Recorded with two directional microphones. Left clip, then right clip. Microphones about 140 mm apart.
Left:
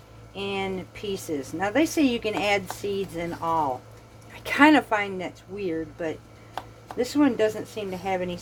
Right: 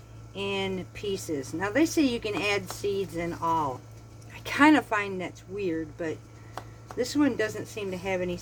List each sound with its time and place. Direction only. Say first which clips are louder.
0.3 s speech: left 1 dB; 20° left (ahead or behind)
6.5 s a sound: left 5 dB; centre (ahead or behind)
7.0 s speech: left 4 dB; 25° left (ahead or behind)